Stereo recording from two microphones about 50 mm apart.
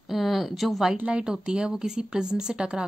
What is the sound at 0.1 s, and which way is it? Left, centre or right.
Speech, centre.